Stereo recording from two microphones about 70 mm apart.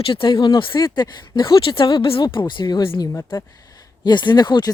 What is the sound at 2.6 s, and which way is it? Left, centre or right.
Speech, left.